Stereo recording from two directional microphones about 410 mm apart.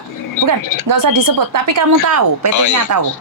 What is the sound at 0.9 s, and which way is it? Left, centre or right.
Speech, right.